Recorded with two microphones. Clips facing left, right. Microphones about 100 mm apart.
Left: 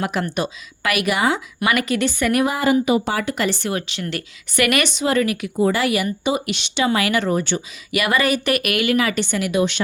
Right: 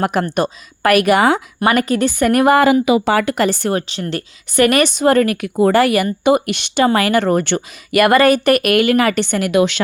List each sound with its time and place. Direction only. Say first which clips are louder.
0.0 s speech: right 6 dB; 50° right (ahead or behind)
1.5 s speech: right 5 dB; 40° right (ahead or behind); by 3.4 s 70° right (ahead or behind)
3.4 s speech: right 5 dB; 45° right (ahead or behind); by 9.8 s 85° right